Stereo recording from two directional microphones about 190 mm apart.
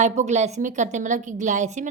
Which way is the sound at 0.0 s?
35° right (ahead or behind).